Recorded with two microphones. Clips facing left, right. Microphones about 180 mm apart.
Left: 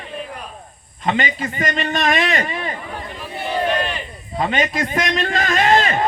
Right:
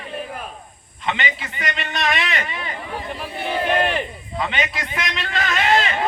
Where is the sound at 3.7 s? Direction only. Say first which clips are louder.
Right 3 dB; 55° right (ahead or behind).